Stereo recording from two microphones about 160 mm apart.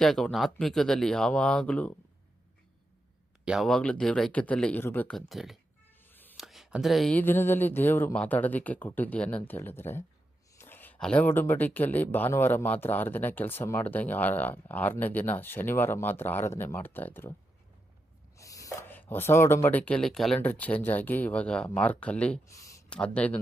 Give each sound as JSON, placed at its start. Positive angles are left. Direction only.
{"t": 0.0, "sound": "speech", "side_deg": 0}
{"t": 3.4, "sound": "speech", "side_deg": -5}
{"t": 6.1, "sound": "a sound", "side_deg": 10}
{"t": 6.3, "sound": "speech", "side_deg": 0}
{"t": 18.3, "sound": "speech", "side_deg": 20}
{"t": 22.4, "sound": "a sound", "side_deg": 20}
{"t": 22.9, "sound": "speech", "side_deg": 5}